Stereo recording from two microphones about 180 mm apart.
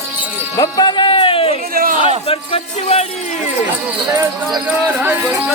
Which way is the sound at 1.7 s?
50° right (ahead or behind).